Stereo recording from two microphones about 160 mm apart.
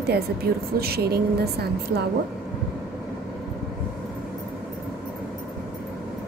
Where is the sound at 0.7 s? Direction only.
75° right (ahead or behind).